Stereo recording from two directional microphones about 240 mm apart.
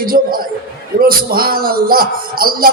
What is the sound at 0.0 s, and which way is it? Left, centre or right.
Speech, right.